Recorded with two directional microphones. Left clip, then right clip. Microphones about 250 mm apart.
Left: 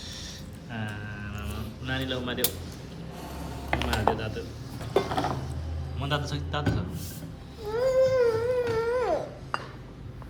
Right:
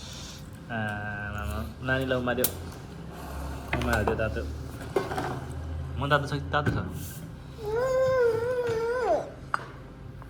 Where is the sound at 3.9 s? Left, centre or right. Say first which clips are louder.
Right 1 dB; centre.